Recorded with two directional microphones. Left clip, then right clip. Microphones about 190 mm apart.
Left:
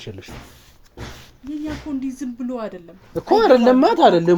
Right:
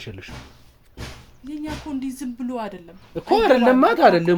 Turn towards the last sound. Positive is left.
turn(degrees=-5)  # may be behind; listen again after turning